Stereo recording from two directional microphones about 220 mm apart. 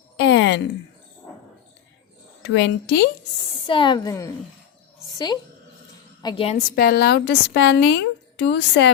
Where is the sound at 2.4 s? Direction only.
55° left (ahead or behind).